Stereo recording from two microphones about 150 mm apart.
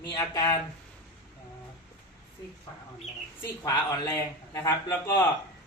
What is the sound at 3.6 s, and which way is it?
A man's voice, 25° left (ahead or behind).